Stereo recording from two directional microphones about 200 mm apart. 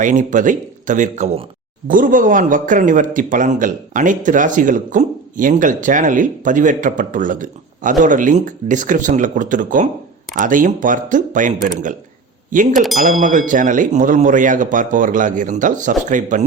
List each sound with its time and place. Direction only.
0.0 s a man's voice: 40° right (ahead or behind)
12.7 s a sound: centre (ahead or behind)
13.2 s a man's voice: 40° right (ahead or behind)